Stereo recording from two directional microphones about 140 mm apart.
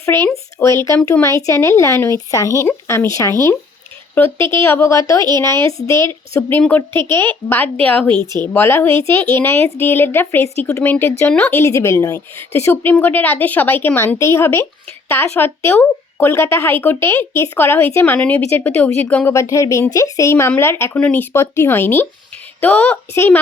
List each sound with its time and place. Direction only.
0.0 s a woman's voice: 20° left (ahead or behind)